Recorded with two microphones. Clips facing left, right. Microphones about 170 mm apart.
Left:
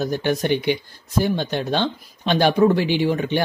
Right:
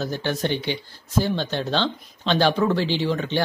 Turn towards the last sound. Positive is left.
turn(degrees=15)  # may be behind; listen again after turning